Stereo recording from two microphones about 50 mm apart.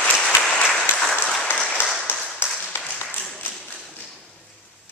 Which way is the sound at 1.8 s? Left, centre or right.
Left.